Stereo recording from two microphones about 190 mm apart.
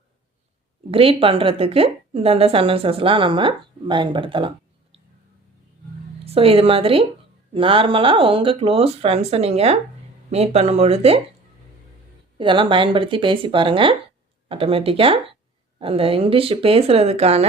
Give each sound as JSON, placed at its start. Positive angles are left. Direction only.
{"t": 0.9, "sound": "a woman's voice", "side_deg": -30}
{"t": 6.2, "sound": "a woman's voice", "side_deg": -30}
{"t": 12.4, "sound": "a woman's voice", "side_deg": -25}